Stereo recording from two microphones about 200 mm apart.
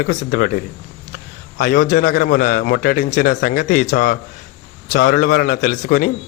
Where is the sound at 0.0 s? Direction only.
40° left (ahead or behind).